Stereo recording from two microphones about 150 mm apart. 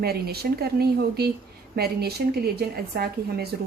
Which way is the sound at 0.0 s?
90° right.